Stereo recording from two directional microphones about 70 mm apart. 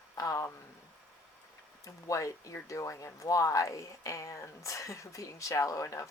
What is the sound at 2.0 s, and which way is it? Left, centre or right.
Speech, left.